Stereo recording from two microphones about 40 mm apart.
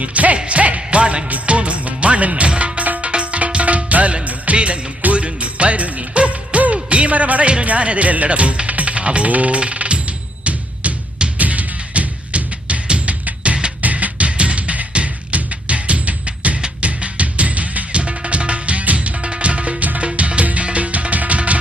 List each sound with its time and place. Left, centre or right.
0.0 s music: right
6.9 s speech: right
7.6 s music: right
13.8 s music: right